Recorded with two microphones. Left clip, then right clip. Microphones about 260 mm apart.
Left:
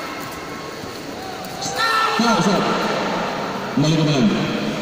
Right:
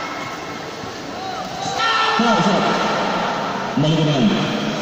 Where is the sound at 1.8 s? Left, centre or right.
Right.